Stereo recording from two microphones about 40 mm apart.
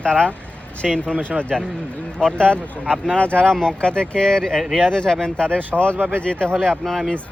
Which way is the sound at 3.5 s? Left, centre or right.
Centre.